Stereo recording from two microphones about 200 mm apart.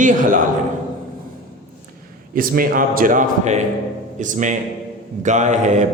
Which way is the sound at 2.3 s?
45° right (ahead or behind).